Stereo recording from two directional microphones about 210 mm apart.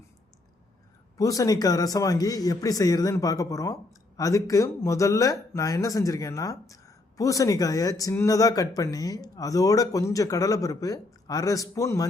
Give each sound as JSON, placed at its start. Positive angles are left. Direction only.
{"t": 1.2, "sound": "speech", "side_deg": 15}